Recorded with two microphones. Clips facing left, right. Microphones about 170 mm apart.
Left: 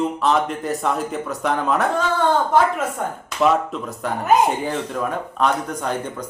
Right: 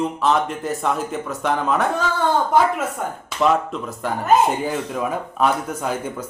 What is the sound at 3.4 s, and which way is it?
Speech, centre (ahead or behind).